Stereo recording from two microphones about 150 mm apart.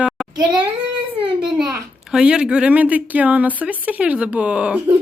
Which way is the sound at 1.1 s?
35° right (ahead or behind).